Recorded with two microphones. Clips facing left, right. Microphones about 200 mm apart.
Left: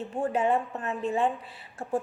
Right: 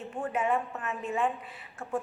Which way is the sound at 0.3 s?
30° left (ahead or behind).